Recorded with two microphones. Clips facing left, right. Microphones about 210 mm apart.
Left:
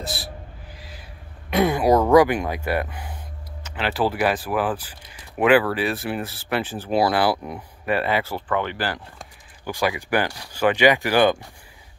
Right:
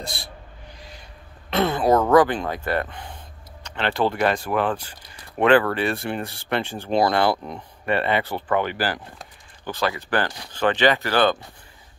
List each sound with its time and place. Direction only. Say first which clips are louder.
0.0 s owl: left 3 dB; 5° left (ahead or behind)
0.7 s a sound: right 1 dB; 5° left (ahead or behind)
1.5 s speech: left 1 dB; 10° left (ahead or behind); by 9.0 s 5° right (ahead or behind)
9.7 s speech: left 2 dB; 15° left (ahead or behind)